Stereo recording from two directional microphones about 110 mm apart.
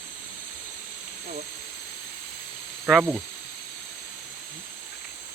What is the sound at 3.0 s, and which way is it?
Speech, 5° right (ahead or behind).